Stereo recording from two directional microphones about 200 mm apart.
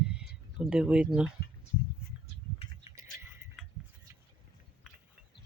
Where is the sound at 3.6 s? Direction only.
5° right (ahead or behind).